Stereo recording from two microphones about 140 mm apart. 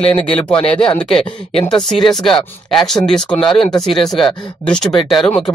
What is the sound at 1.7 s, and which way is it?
Speech, 30° left (ahead or behind).